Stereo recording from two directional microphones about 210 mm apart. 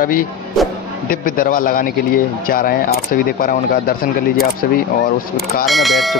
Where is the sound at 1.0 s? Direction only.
40° left (ahead or behind).